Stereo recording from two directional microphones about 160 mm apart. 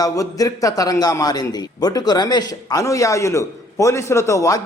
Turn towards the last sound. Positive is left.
turn(degrees=20)  # may be behind; listen again after turning